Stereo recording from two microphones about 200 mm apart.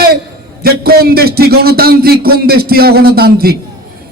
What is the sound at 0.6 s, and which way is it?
A man's voice, 50° right (ahead or behind).